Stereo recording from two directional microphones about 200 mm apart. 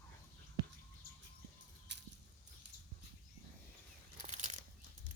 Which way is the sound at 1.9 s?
60° right (ahead or behind).